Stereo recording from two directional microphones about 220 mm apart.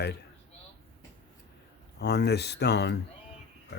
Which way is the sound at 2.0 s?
50° left (ahead or behind).